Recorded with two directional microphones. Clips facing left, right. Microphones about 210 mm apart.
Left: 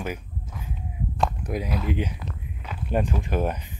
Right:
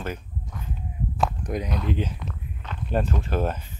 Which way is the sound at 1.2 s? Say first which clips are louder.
Even; 5° left (ahead or behind).